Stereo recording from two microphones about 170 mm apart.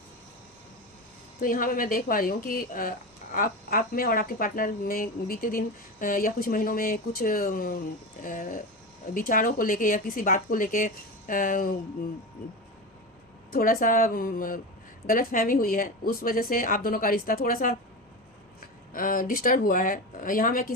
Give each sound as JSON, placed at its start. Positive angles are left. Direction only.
{"t": 1.4, "sound": "speech", "side_deg": 55}
{"t": 13.5, "sound": "speech", "side_deg": 55}
{"t": 18.9, "sound": "speech", "side_deg": 55}